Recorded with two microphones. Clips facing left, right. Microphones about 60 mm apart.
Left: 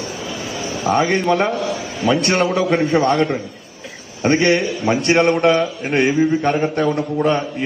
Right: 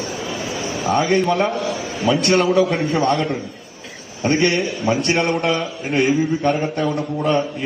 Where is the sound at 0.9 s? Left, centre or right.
Left.